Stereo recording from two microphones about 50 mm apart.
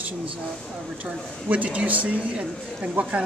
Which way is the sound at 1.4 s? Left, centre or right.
Right.